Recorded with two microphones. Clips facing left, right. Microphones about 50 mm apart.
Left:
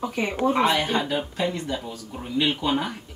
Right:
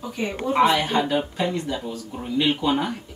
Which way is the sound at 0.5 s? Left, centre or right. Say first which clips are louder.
Right 7 dB; centre.